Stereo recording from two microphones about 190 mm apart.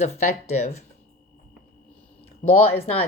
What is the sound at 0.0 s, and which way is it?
Speech, 35° left (ahead or behind).